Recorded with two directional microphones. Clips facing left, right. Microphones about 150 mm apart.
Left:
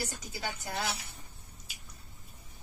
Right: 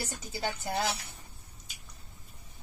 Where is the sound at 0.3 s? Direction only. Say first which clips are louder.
Right 4 dB; 30° right (ahead or behind).